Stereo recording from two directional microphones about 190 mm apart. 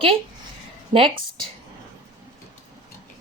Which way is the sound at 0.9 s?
30° right (ahead or behind).